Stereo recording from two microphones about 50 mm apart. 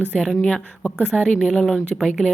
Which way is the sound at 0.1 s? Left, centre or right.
Centre.